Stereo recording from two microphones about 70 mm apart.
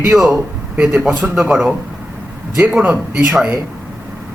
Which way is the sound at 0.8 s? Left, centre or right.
Centre.